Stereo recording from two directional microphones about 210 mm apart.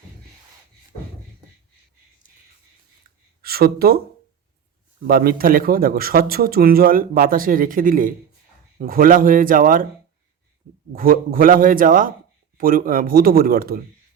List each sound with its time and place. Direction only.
3.4 s speech: 45° right (ahead or behind)
5.0 s a man's voice: 45° right (ahead or behind)
10.9 s a man's voice: 40° right (ahead or behind)